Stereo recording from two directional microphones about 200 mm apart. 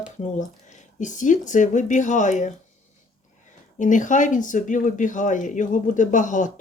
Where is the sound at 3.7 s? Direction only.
40° left (ahead or behind).